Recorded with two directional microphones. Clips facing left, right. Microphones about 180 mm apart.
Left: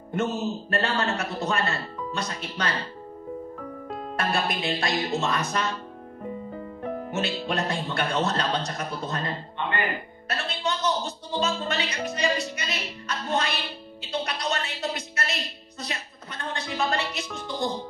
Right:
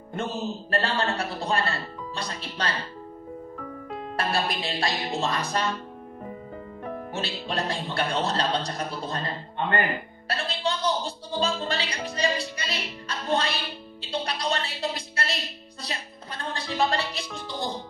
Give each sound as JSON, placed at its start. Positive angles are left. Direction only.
{"t": 0.1, "sound": "a man's voice", "side_deg": -35}
{"t": 4.3, "sound": "a man's voice", "side_deg": -30}
{"t": 7.1, "sound": "a man's voice", "side_deg": -30}
{"t": 10.2, "sound": "speech", "side_deg": -30}
{"t": 14.2, "sound": "music", "side_deg": -35}
{"t": 15.8, "sound": "a man's voice", "side_deg": -35}